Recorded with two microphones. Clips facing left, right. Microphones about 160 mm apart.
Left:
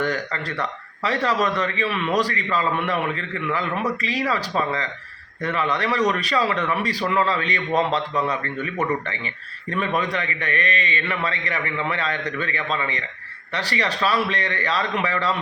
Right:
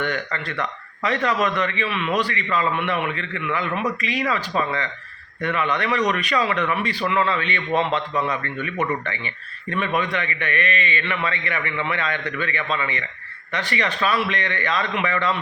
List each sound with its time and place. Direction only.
0.0 s a man's voice: 35° left (ahead or behind)